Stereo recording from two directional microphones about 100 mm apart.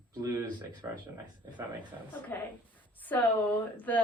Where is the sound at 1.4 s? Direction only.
35° right (ahead or behind).